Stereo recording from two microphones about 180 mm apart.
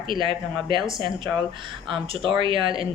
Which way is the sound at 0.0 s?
25° right (ahead or behind).